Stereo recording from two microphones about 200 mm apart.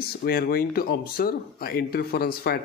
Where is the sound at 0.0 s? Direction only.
50° left (ahead or behind).